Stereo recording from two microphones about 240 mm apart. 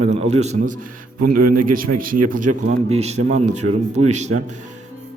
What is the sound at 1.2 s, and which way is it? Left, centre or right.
Speech, right.